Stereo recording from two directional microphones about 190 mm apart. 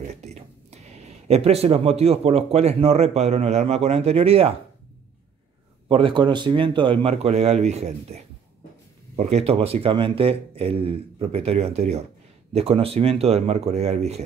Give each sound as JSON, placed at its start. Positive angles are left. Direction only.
{"t": 0.0, "sound": "speech", "side_deg": -35}
{"t": 5.9, "sound": "speech", "side_deg": -25}